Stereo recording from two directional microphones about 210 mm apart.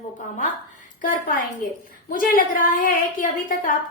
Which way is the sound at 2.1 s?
40° left (ahead or behind).